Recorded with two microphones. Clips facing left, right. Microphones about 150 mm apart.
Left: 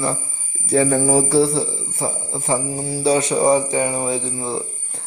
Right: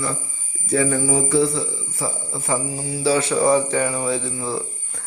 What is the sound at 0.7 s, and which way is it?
Speech, 35° left (ahead or behind).